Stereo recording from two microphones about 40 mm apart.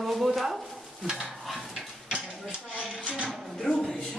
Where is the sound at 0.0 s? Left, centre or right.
Centre.